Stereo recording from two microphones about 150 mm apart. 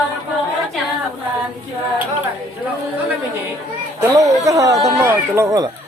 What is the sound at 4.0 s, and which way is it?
Speech, 20° right (ahead or behind).